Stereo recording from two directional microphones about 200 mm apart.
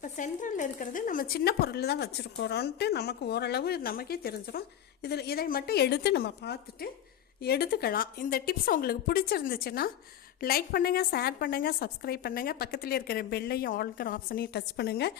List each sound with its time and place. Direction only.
0.0 s a woman's voice: 40° left (ahead or behind)